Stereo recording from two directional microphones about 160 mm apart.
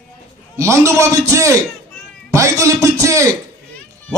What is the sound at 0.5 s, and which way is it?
A man's voice, 20° right (ahead or behind).